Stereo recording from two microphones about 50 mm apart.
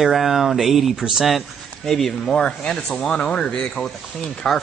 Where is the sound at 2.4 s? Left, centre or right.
Centre.